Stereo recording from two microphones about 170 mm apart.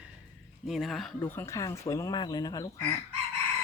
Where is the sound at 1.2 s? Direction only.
15° left (ahead or behind).